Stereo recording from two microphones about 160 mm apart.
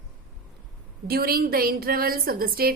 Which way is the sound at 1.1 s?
70° right (ahead or behind).